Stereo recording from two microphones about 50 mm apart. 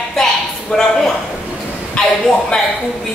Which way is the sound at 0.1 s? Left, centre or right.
Centre.